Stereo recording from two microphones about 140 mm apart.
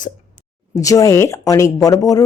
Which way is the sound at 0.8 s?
25° left (ahead or behind).